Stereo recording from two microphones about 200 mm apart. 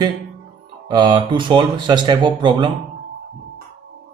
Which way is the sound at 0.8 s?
20° right (ahead or behind).